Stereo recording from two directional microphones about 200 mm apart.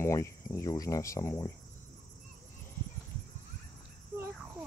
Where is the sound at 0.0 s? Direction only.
15° left (ahead or behind).